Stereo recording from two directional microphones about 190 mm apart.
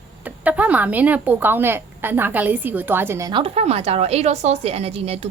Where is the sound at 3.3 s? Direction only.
30° right (ahead or behind).